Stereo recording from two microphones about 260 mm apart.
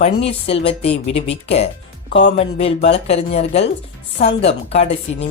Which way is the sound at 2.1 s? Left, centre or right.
Left.